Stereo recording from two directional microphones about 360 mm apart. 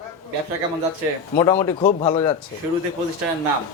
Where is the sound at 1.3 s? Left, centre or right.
Centre.